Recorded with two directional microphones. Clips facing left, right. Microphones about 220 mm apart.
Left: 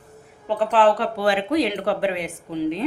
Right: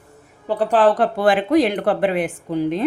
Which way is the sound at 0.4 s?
40° right (ahead or behind).